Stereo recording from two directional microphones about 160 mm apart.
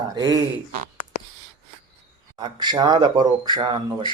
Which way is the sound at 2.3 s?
25° right (ahead or behind).